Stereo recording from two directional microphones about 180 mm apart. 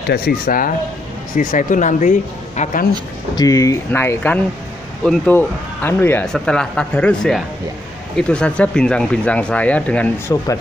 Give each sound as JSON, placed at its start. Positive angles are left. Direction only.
{"t": 0.1, "sound": "speech", "side_deg": 60}
{"t": 3.3, "sound": "speech", "side_deg": 20}